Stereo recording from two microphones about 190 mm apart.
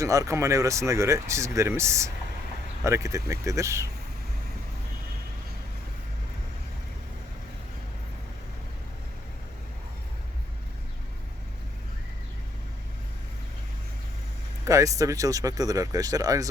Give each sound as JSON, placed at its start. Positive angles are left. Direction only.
{"t": 0.0, "sound": "speech", "side_deg": -15}
{"t": 14.6, "sound": "speech", "side_deg": -15}